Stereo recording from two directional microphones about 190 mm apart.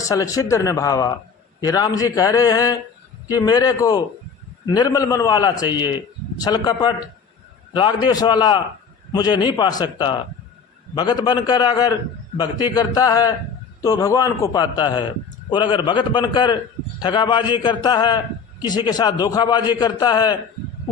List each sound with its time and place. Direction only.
0.0 s a man's voice: 15° left (ahead or behind)